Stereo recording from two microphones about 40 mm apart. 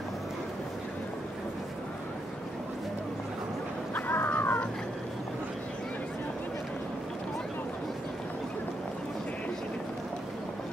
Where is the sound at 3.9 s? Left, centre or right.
Left.